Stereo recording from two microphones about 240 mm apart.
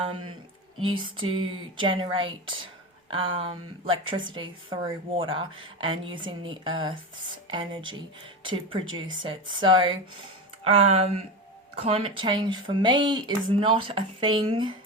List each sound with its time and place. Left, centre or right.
0.9 s speech: right